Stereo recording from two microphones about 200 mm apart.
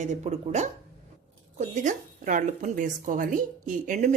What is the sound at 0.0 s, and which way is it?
Speech, 35° right (ahead or behind).